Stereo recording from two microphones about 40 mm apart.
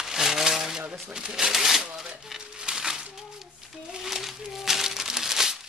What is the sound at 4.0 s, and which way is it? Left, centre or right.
Crumpling, centre.